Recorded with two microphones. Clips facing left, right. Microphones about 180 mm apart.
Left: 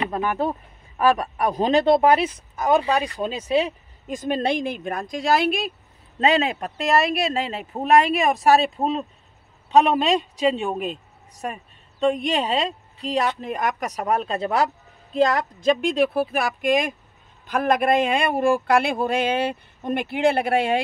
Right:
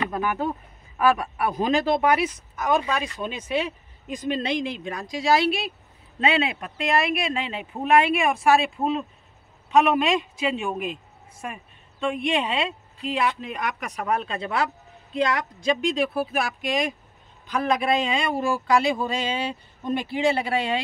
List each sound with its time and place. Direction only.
0.1 s speech: 30° left (ahead or behind); by 5.7 s 50° left (ahead or behind)
6.1 s speech: 40° left (ahead or behind)
17.5 s a sound: 55° left (ahead or behind)